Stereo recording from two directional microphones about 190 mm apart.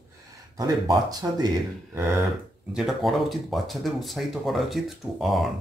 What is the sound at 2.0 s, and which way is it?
Throat clearing, 15° right (ahead or behind).